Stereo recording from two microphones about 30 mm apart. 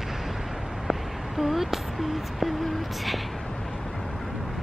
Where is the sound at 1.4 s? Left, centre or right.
Centre.